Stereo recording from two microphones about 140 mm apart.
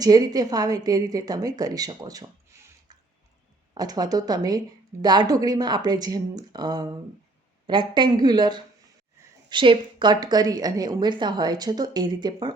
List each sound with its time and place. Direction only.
0.0 s a woman's voice: 25° right (ahead or behind)
3.8 s a woman's voice: 30° right (ahead or behind)